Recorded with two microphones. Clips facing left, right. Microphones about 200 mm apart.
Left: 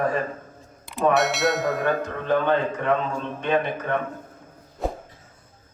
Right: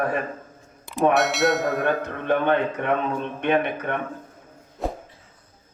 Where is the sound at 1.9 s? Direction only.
60° right (ahead or behind).